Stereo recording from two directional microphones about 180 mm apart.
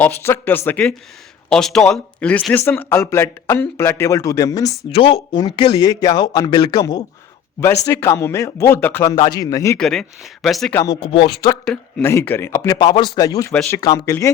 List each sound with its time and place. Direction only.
0.0 s speech: 10° left (ahead or behind)
4.9 s speech: 30° left (ahead or behind)
9.7 s speech: 5° left (ahead or behind)
11.1 s speech: 25° left (ahead or behind)
11.6 s speech: 5° left (ahead or behind)